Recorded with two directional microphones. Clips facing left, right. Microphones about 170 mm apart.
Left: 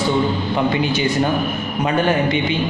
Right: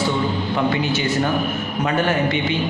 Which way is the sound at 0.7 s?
15° left (ahead or behind).